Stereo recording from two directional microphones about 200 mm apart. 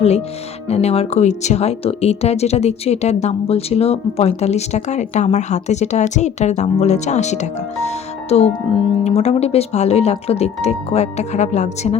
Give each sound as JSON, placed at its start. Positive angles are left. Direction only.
{"t": 0.0, "sound": "speech", "side_deg": 30}